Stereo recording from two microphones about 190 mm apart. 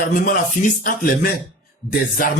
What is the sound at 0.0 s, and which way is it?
Speech, 45° left (ahead or behind).